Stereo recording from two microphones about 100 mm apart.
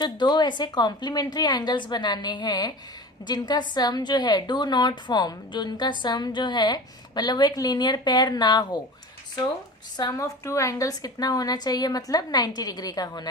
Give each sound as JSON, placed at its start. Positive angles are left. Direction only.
{"t": 0.0, "sound": "a woman's voice", "side_deg": 50}
{"t": 10.0, "sound": "a woman's voice", "side_deg": 35}